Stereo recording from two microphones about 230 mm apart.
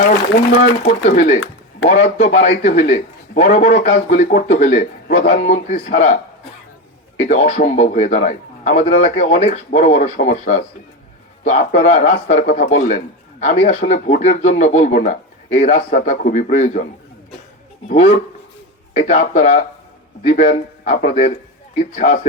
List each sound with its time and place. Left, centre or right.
0.9 s a man's voice: left
7.2 s a man's voice: left
17.8 s a man's voice: left